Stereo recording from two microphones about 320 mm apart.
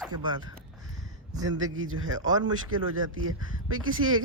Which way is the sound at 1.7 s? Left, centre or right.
Right.